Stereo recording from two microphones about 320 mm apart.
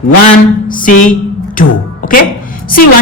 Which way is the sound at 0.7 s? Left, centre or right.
Left.